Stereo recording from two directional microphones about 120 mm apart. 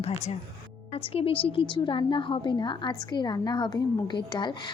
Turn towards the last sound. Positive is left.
turn(degrees=40)  # may be behind; listen again after turning